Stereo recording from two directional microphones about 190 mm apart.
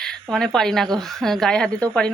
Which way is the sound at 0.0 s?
Centre (ahead or behind).